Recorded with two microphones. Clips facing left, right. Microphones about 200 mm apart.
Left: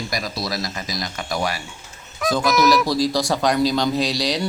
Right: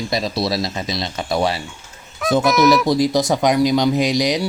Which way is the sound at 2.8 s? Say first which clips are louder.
Right 4 dB; 20° right (ahead or behind).